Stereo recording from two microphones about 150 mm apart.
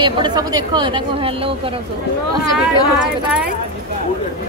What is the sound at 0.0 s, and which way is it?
Speech, 30° right (ahead or behind).